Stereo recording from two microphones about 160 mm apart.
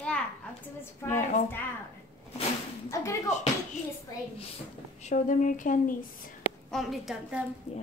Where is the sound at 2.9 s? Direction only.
20° left (ahead or behind).